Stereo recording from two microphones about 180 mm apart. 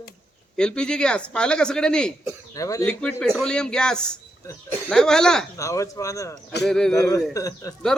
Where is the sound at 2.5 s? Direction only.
20° left (ahead or behind).